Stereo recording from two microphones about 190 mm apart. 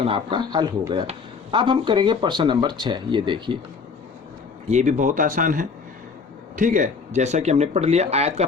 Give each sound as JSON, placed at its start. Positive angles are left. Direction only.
{"t": 0.0, "sound": "speech", "side_deg": -25}
{"t": 4.7, "sound": "speech", "side_deg": -40}